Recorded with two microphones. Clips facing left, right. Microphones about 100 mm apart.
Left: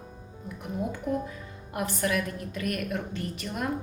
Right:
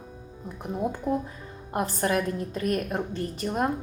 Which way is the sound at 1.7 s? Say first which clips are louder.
Right 3 dB; 35° right (ahead or behind).